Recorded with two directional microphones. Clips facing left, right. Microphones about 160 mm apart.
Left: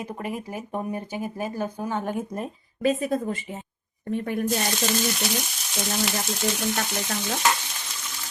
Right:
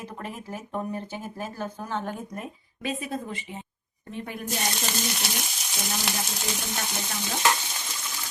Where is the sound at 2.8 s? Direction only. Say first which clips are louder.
Left 8 dB; 45° left (ahead or behind).